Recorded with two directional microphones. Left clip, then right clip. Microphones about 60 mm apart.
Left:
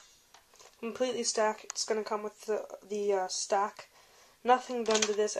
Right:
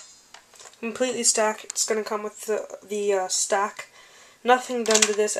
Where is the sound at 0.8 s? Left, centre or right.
Left.